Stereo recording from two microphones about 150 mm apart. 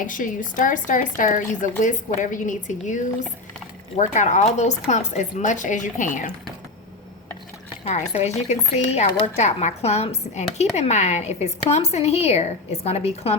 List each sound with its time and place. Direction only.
0.0 s speech: 60° left (ahead or behind)
7.9 s speech: 50° left (ahead or behind)